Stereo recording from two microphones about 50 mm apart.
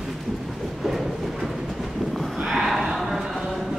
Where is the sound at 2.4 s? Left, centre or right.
Centre.